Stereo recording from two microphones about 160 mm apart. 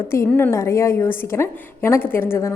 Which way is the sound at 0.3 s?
10° left (ahead or behind).